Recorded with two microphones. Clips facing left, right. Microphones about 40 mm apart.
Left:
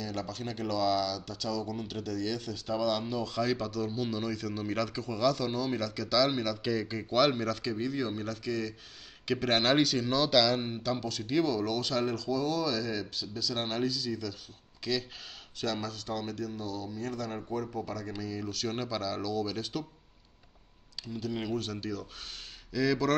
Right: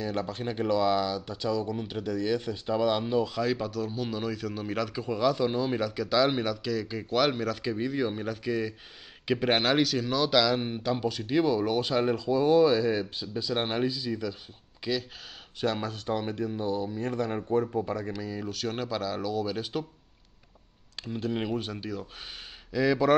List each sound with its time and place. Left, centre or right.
0.0 s speech: right
3.3 s speech: centre
6.6 s speech: centre
6.9 s speech: centre
9.7 s speech: centre; by 18.1 s right
18.1 s speech: centre
21.0 s speech: right; by 23.1 s centre